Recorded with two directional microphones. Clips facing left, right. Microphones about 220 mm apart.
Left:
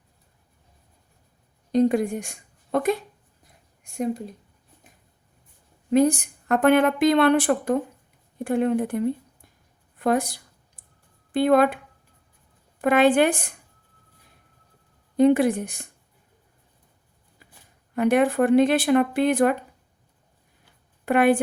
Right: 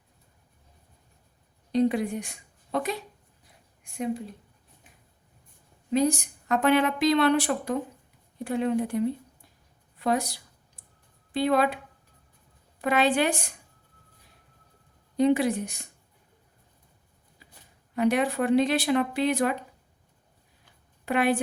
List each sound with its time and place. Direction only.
1.7 s a woman's voice: 45° left (ahead or behind)
5.9 s a woman's voice: 55° left (ahead or behind)
12.8 s a woman's voice: 50° left (ahead or behind)
15.2 s a woman's voice: 50° left (ahead or behind)
17.9 s a woman's voice: 50° left (ahead or behind)
21.0 s a woman's voice: 50° left (ahead or behind)